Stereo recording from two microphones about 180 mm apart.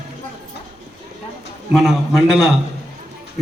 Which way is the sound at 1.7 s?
Centre (ahead or behind).